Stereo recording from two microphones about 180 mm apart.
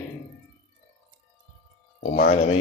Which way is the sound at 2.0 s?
55° left (ahead or behind).